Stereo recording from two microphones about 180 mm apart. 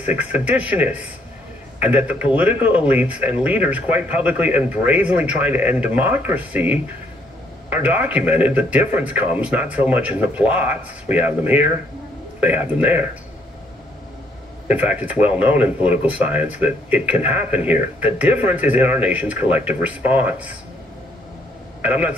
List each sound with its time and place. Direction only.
0.0 s speech: 10° right (ahead or behind)
14.7 s speech: 10° right (ahead or behind)
21.8 s speech: 10° right (ahead or behind)